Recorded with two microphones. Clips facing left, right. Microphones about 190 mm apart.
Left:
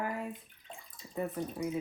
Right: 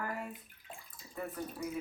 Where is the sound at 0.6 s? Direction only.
5° right (ahead or behind).